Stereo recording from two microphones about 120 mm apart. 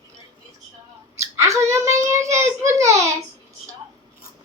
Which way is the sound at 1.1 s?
25° right (ahead or behind).